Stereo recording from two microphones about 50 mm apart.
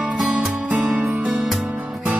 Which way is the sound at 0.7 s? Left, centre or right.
Right.